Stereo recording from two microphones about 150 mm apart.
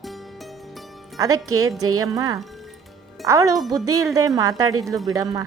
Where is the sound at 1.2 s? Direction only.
20° right (ahead or behind).